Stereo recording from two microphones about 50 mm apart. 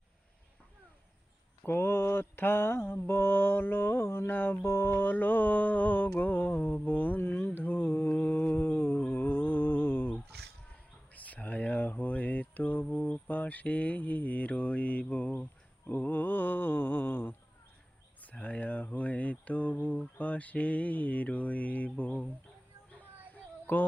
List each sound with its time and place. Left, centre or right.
1.6 s mantra: left
4.6 s mantra: left
11.1 s a sound: left
12.9 s speech: left
15.9 s mantra: left
18.2 s speech: left
23.3 s a sound: left